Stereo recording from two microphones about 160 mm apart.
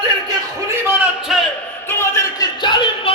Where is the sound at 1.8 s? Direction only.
15° left (ahead or behind).